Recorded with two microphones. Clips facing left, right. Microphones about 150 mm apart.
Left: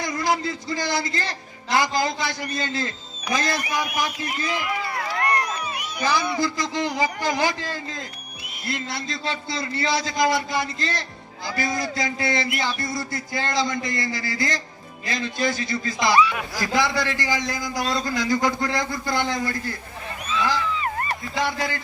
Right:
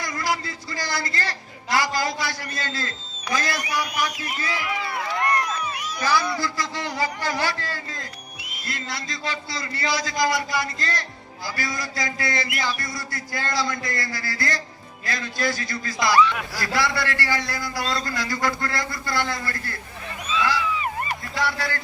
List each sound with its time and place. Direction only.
0.0 s a man's voice: 20° left (ahead or behind)
5.5 s a man's voice: 15° left (ahead or behind)
16.2 s speech: 5° left (ahead or behind)
16.6 s a man's voice: 20° left (ahead or behind)
21.3 s a man's voice: 20° left (ahead or behind)